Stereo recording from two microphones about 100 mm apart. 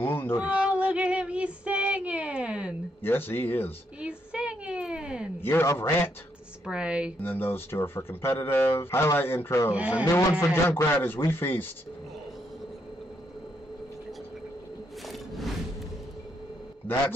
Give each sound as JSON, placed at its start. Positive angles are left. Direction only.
{"t": 0.0, "sound": "speech", "side_deg": 20}
{"t": 0.4, "sound": "child singing", "side_deg": -10}
{"t": 3.0, "sound": "speech", "side_deg": 20}
{"t": 4.0, "sound": "a sound", "side_deg": -10}
{"t": 5.4, "sound": "speech", "side_deg": 20}
{"t": 6.6, "sound": "speech", "side_deg": -10}
{"t": 7.2, "sound": "speech", "side_deg": 20}
{"t": 9.8, "sound": "speech", "side_deg": -15}
{"t": 10.4, "sound": "speech", "side_deg": 25}
{"t": 15.0, "sound": "music", "side_deg": 0}